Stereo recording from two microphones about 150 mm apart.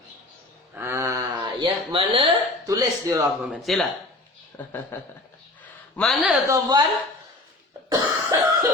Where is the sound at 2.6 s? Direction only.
20° right (ahead or behind).